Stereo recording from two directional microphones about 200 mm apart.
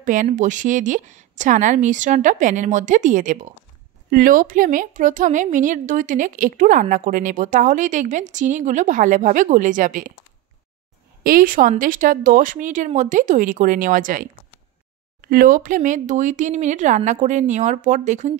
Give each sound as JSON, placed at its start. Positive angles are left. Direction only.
{"t": 0.0, "sound": "a woman's voice", "side_deg": -40}
{"t": 11.2, "sound": "a woman's voice", "side_deg": -45}